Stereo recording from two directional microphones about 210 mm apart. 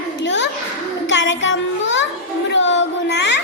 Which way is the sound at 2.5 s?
60° left (ahead or behind).